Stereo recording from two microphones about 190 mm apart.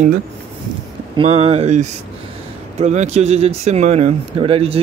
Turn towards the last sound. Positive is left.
turn(degrees=-30)  # may be behind; listen again after turning